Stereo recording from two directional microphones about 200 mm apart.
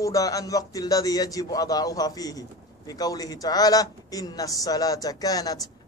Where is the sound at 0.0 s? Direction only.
15° left (ahead or behind).